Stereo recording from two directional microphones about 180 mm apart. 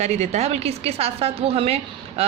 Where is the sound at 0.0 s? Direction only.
40° right (ahead or behind).